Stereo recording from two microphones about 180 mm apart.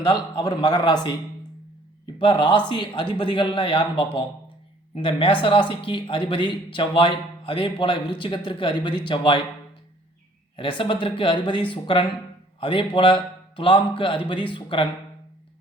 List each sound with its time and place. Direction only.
0.0 s speech: 25° left (ahead or behind)
2.1 s speech: 25° left (ahead or behind)
10.6 s speech: 30° left (ahead or behind)